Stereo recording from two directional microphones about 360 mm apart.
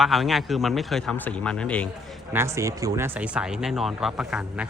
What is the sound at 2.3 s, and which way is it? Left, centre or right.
A man's voice, centre.